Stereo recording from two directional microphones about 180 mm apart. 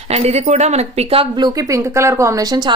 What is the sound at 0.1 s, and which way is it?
Speech, 35° right (ahead or behind).